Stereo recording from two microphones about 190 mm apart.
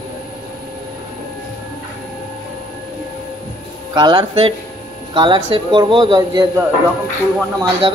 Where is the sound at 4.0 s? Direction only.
20° right (ahead or behind).